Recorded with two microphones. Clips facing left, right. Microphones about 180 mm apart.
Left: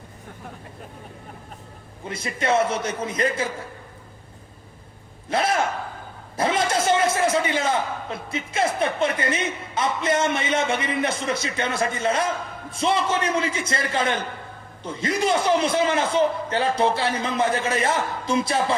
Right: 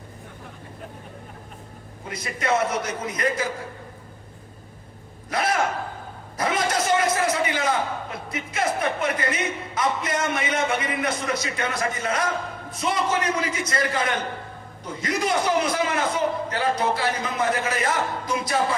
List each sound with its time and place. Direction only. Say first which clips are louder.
2.0 s a man's voice: left 1 dB; 30° left (ahead or behind)
5.3 s a sound: left 1 dB; 25° left (ahead or behind)
8.3 s a man's voice: left 2 dB; 30° left (ahead or behind)